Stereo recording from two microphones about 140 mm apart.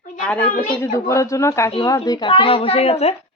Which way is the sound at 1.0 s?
20° left (ahead or behind).